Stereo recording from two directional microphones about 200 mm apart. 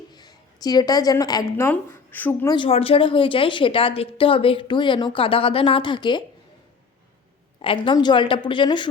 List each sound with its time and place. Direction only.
0.1 s a woman's voice: 20° left (ahead or behind)
2.6 s speech: 30° left (ahead or behind)
7.6 s speech: 25° left (ahead or behind)